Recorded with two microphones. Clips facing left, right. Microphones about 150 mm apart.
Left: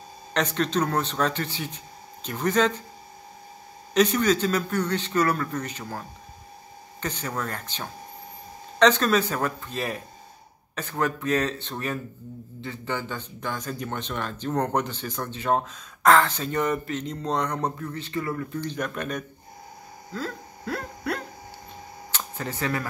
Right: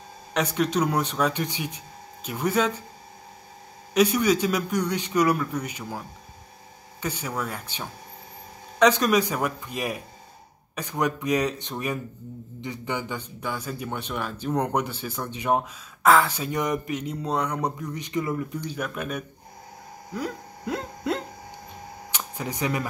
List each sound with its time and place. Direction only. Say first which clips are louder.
0.3 s speech: right 1 dB; 10° right (ahead or behind)
3.9 s speech: even; 10° right (ahead or behind)
20.1 s a sound: right 2 dB; 15° right (ahead or behind)
22.1 s camera: even; 15° right (ahead or behind)